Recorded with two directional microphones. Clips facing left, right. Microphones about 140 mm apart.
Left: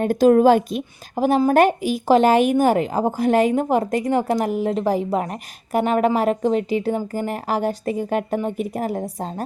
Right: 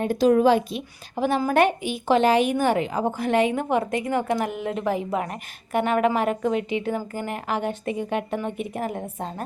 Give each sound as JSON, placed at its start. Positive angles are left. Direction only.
{"t": 0.0, "sound": "a woman's voice", "side_deg": 45}